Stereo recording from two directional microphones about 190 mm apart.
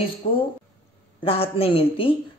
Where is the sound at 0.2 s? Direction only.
30° left (ahead or behind).